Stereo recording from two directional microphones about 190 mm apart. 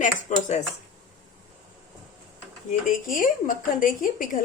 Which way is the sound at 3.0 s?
45° left (ahead or behind).